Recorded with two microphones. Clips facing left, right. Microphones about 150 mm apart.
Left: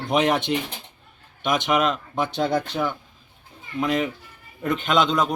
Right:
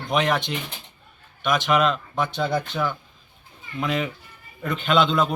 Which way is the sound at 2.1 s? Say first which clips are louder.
Left 1 dB; 25° left (ahead or behind).